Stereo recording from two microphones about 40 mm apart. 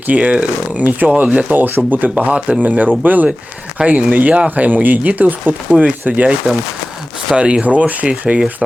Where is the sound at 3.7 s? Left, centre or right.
Right.